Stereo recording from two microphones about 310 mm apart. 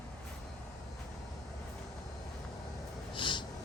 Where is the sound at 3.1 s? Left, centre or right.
Centre.